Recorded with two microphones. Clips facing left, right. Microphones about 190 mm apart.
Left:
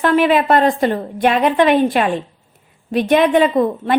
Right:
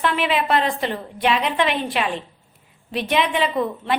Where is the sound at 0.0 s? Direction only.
45° left (ahead or behind).